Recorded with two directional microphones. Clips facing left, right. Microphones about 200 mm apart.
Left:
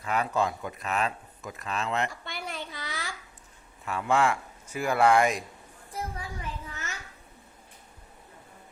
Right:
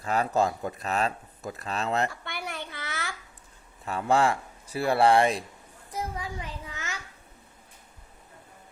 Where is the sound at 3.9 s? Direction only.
35° right (ahead or behind).